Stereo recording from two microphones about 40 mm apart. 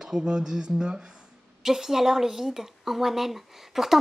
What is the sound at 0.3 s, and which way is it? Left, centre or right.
Speech, centre.